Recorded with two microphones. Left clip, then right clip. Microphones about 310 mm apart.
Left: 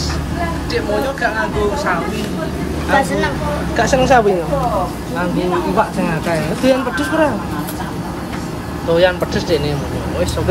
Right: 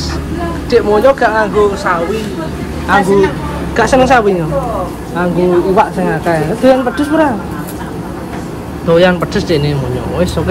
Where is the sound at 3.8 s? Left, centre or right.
Centre.